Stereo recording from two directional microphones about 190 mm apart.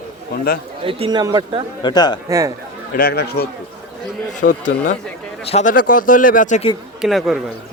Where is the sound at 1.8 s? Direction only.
20° left (ahead or behind).